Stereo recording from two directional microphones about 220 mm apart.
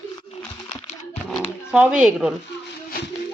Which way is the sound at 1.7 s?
5° right (ahead or behind).